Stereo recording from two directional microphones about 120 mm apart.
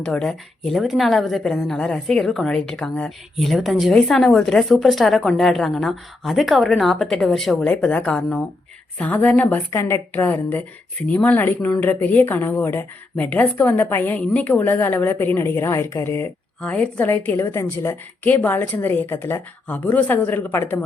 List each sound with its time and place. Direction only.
0.0 s a woman's voice: 5° left (ahead or behind); by 16.3 s 20° left (ahead or behind)
16.6 s speech: 10° left (ahead or behind)